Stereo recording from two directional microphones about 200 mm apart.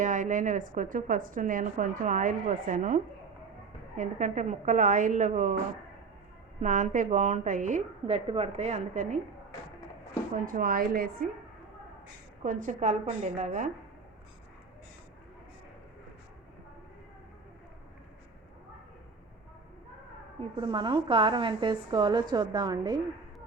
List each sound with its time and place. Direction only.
0.0 s a woman's voice: 40° right (ahead or behind)
6.6 s a woman's voice: 40° right (ahead or behind)
10.3 s a woman's voice: 45° right (ahead or behind)
12.4 s a woman's voice: 40° right (ahead or behind)
20.6 s a woman's voice: 25° right (ahead or behind)